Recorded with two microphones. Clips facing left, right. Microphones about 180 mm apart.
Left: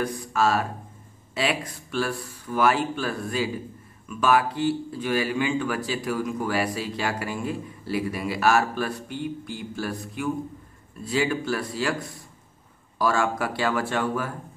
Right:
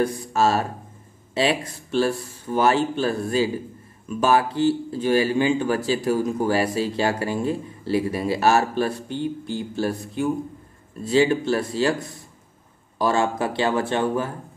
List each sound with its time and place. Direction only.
0.0 s speech: 30° right (ahead or behind)
13.0 s speech: 25° right (ahead or behind)